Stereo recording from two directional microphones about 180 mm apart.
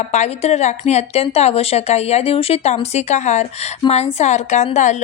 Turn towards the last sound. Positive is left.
turn(degrees=40)  # may be behind; listen again after turning